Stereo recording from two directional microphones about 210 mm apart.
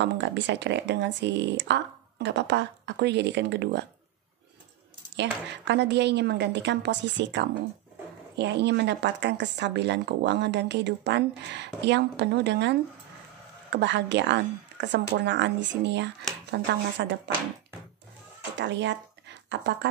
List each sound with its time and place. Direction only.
0.0 s speech: 60° right (ahead or behind)
5.1 s speech: 55° right (ahead or behind)
18.6 s speech: 60° right (ahead or behind)